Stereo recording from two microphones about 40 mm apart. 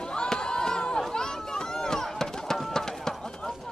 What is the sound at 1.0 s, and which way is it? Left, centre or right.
Chatter, centre.